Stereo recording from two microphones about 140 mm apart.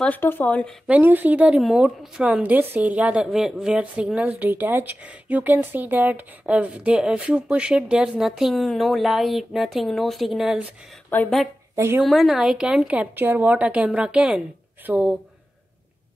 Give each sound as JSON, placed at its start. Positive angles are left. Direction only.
{"t": 0.0, "sound": "speech", "side_deg": 15}
{"t": 0.8, "sound": "a woman's voice", "side_deg": -10}
{"t": 11.1, "sound": "speech", "side_deg": 10}
{"t": 11.7, "sound": "speech", "side_deg": -20}
{"t": 12.0, "sound": "a woman's voice", "side_deg": 0}